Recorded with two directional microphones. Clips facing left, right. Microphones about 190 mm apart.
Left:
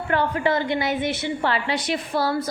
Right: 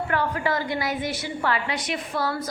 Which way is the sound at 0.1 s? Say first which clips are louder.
Left 5 dB; 25° left (ahead or behind).